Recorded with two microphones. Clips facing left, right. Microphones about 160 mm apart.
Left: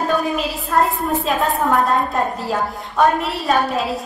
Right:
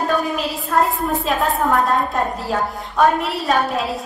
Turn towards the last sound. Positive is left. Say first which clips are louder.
# left 1 dB
turn(degrees=0)  # may be behind; listen again after turning